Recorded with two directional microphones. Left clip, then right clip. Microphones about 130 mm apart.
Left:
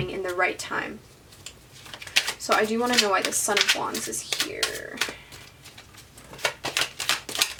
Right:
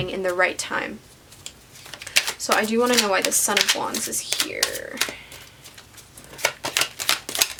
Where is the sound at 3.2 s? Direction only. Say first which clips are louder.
Right 2 dB; 25° right (ahead or behind).